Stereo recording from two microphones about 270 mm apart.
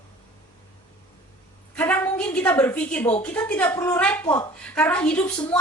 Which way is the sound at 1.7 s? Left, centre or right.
Centre.